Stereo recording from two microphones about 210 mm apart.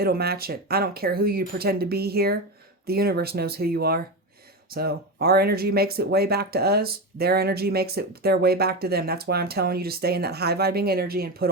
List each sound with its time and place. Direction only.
0.0 s speech: 50° right (ahead or behind)